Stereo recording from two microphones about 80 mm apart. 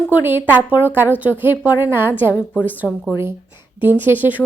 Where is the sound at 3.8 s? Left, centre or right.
Right.